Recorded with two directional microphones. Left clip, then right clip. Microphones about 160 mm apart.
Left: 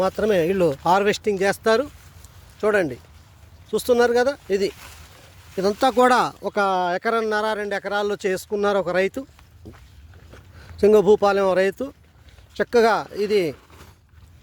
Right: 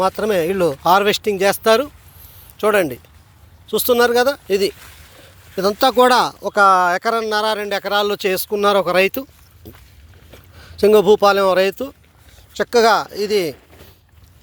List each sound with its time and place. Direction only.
0.0 s speech: 20° left (ahead or behind); by 4.7 s centre (ahead or behind)
5.5 s speech: 10° left (ahead or behind)
9.6 s a sound: 15° left (ahead or behind)
10.6 s speech: 10° left (ahead or behind)